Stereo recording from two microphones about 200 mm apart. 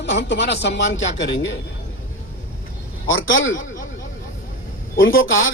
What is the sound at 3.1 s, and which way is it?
Speech, 75° left (ahead or behind).